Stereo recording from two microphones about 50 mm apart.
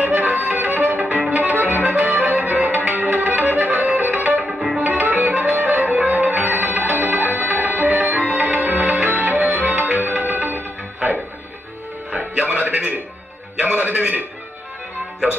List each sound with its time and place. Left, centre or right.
0.0 s music: right
4.5 s music: centre
4.7 s music: right